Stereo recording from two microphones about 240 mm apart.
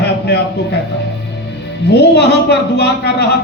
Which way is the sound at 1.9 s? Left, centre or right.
Left.